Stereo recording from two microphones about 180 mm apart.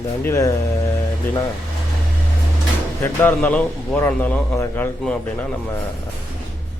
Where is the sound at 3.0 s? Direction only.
10° left (ahead or behind).